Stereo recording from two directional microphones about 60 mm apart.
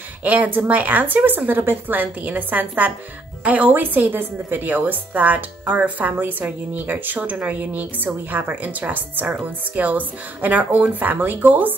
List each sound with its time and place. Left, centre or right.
0.2 s a woman's voice: right